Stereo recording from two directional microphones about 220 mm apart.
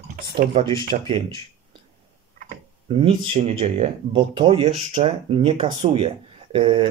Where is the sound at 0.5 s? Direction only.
20° right (ahead or behind).